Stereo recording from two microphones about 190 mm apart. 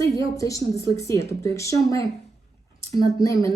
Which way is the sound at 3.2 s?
15° left (ahead or behind).